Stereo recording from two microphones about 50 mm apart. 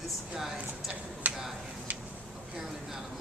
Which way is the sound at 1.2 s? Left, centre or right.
Right.